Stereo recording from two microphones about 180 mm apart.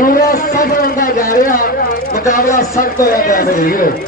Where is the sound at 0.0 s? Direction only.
55° left (ahead or behind).